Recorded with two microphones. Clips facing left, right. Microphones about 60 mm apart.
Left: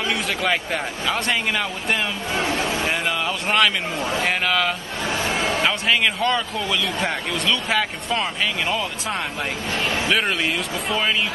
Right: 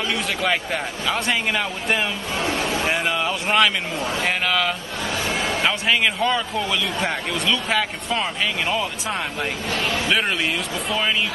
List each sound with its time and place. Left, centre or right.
0.1 s a man's voice: centre
4.0 s a man's voice: left
4.3 s a man's voice: centre
5.1 s a sound: left
5.6 s a man's voice: centre
9.7 s speech: left
10.0 s a man's voice: centre